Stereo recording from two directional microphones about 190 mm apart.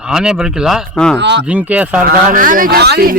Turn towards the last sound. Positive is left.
turn(degrees=-55)  # may be behind; listen again after turning